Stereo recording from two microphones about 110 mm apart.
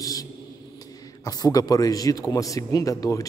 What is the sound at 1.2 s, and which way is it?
A man's voice, 35° left (ahead or behind).